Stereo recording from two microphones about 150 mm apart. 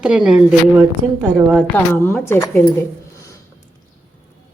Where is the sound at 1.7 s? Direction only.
15° left (ahead or behind).